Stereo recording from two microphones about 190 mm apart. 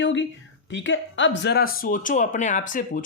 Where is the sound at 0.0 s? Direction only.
70° left (ahead or behind).